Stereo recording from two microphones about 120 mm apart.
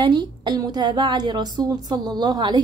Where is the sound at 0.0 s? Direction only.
40° right (ahead or behind).